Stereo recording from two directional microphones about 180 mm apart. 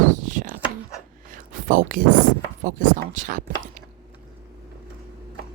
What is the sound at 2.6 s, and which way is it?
Speech, 45° right (ahead or behind).